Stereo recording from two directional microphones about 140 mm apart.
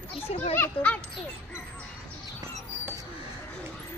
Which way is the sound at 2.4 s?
20° right (ahead or behind).